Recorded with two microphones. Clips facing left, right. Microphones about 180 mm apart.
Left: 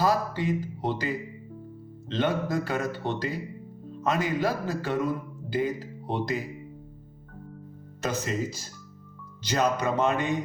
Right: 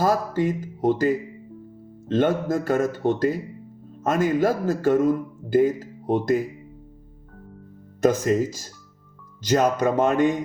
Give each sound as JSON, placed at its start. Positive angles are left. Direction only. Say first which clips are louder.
{"t": 0.0, "sound": "a man's voice", "louder": "right 4 dB", "side_deg": -50}
{"t": 8.0, "sound": "a man's voice", "louder": "right 10 dB", "side_deg": -50}